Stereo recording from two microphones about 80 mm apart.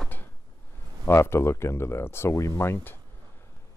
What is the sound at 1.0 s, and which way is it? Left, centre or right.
Speech, left.